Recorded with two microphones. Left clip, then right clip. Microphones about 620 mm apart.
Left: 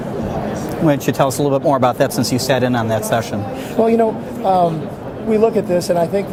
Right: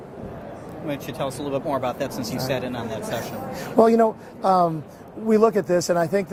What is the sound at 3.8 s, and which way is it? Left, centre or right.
Speech, right.